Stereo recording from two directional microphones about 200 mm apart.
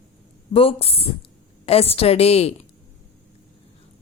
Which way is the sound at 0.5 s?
30° left (ahead or behind).